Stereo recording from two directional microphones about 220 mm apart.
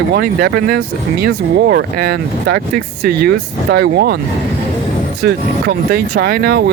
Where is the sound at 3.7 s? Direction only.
45° right (ahead or behind).